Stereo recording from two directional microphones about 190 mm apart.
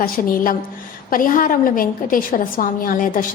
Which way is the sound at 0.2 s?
45° left (ahead or behind).